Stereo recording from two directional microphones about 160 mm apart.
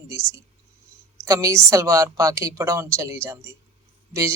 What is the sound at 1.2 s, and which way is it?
Speech, 20° right (ahead or behind).